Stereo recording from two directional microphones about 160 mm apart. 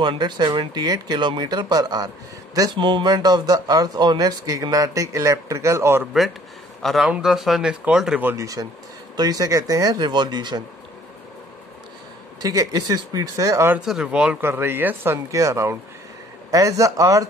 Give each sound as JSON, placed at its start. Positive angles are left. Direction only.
{"t": 0.0, "sound": "speech", "side_deg": -30}
{"t": 6.8, "sound": "speech", "side_deg": 0}
{"t": 12.4, "sound": "speech", "side_deg": -25}
{"t": 13.7, "sound": "speech", "side_deg": -5}